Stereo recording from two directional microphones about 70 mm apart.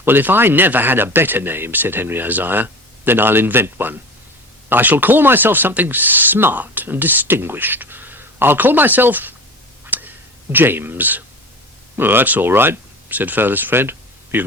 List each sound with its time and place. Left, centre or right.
0.0 s speech: right
9.8 s whip: right
10.5 s speech: right